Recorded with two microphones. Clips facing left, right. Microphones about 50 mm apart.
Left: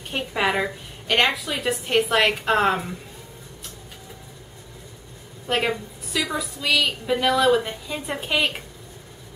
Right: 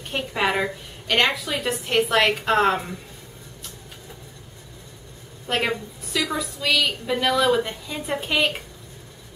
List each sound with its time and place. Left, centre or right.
0.1 s a woman's voice: centre
5.5 s a woman's voice: centre